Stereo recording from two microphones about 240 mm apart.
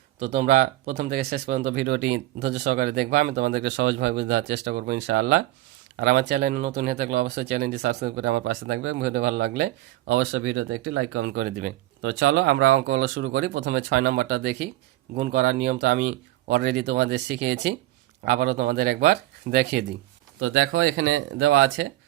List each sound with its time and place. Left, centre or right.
0.2 s speech: right
10.1 s speech: right
12.0 s speech: right
20.4 s speech: right